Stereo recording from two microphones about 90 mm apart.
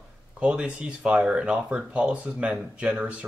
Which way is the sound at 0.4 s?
10° right (ahead or behind).